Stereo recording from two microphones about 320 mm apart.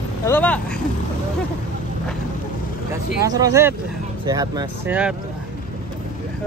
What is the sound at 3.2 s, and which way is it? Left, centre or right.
Speech, centre.